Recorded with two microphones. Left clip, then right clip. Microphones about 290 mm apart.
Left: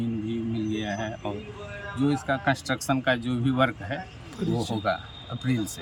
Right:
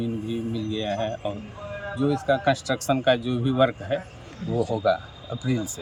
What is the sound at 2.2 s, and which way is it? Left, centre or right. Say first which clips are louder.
Speech: right 4 dB; centre.